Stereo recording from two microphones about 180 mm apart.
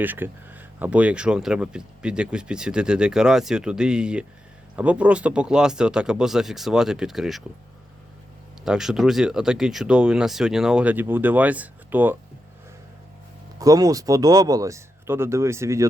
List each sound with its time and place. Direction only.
0.0 s speech: 10° right (ahead or behind)
8.6 s speech: 5° right (ahead or behind)
13.6 s speech: 20° right (ahead or behind)